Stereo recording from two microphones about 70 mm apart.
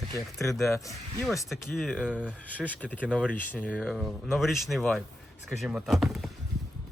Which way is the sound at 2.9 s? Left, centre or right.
Centre.